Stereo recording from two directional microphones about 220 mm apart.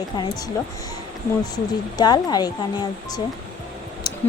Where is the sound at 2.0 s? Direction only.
20° left (ahead or behind).